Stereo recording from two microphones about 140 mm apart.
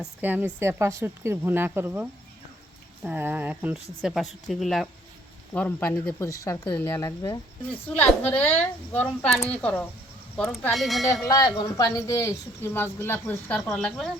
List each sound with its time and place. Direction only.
0.0 s a woman's voice: 10° right (ahead or behind)
11.1 s speech: 20° left (ahead or behind)
13.7 s speech: centre (ahead or behind)